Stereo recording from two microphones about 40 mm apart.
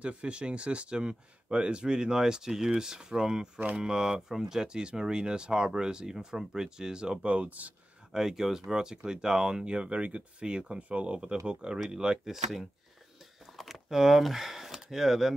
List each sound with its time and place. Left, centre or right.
0.0 s speech: right
7.2 s speech: right
8.1 s speech: centre
9.7 s speech: right
10.4 s speech: right
10.8 s speech: right
11.4 s speech: right
13.6 s a sound: centre